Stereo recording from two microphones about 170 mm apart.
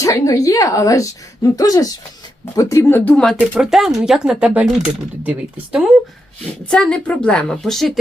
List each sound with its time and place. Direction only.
0.0 s a woman's voice: 20° left (ahead or behind); by 5.9 s 5° right (ahead or behind)
6.7 s a woman's voice: 5° left (ahead or behind)